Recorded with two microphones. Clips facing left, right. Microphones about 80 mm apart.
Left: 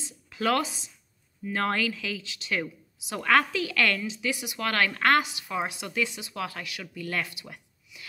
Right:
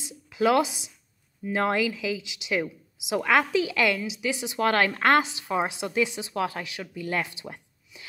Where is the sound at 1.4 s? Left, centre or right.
Centre.